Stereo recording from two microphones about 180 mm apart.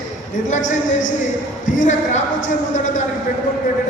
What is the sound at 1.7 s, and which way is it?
Speech, 45° left (ahead or behind).